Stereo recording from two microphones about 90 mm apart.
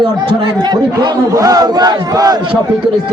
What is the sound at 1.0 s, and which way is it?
Speech, 40° right (ahead or behind).